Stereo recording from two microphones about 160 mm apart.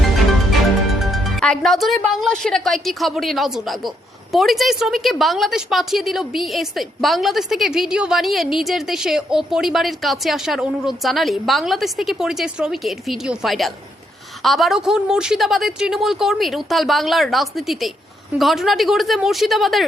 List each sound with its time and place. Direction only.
1.1 s speech: centre (ahead or behind)